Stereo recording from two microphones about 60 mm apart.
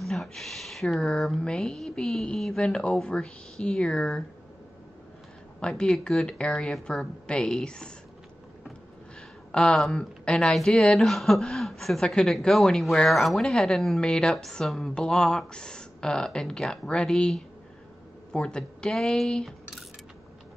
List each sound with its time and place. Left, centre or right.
0.0 s a sound: centre
1.0 s a woman's voice: centre
5.6 s a woman's voice: centre
6.5 s a woman's voice: centre
9.5 s a woman's voice: centre
10.5 s a woman's voice: centre